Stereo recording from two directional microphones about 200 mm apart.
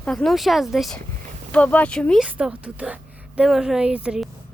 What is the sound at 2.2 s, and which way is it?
A woman's voice, 5° right (ahead or behind).